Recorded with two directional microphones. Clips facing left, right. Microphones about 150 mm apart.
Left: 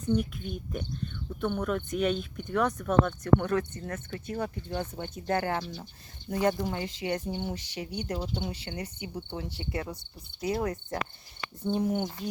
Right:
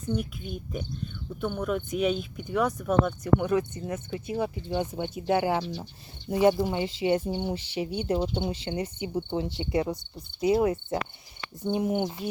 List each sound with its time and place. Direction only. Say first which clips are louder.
0.1 s speech: left 2 dB; 5° right (ahead or behind)
8.0 s speech: right 6 dB; 25° right (ahead or behind)
11.7 s speech: right 2 dB; 20° right (ahead or behind)